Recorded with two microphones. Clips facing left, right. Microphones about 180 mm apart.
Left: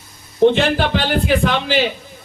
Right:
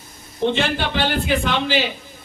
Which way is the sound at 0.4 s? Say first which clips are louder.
Left 7 dB; 55° left (ahead or behind).